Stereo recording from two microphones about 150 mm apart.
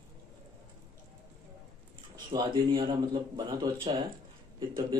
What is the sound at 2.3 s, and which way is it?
Speech, 30° right (ahead or behind).